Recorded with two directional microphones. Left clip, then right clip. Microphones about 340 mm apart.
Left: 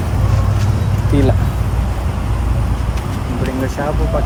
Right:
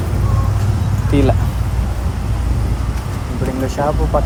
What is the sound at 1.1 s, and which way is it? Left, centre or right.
Speech, centre.